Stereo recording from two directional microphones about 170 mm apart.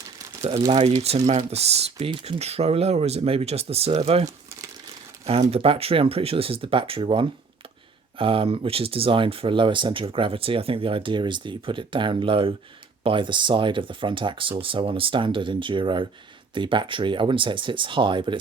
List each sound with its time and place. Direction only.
0.7 s speech: 40° right (ahead or behind)